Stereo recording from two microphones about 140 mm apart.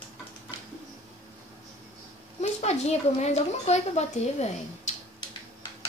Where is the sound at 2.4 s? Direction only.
50° left (ahead or behind).